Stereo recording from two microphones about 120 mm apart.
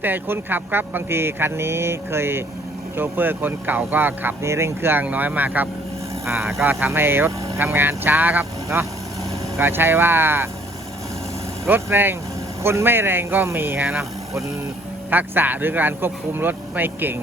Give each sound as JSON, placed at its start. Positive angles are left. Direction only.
{"t": 0.0, "sound": "speech", "side_deg": -15}
{"t": 11.6, "sound": "speech", "side_deg": -20}
{"t": 15.1, "sound": "speech", "side_deg": -15}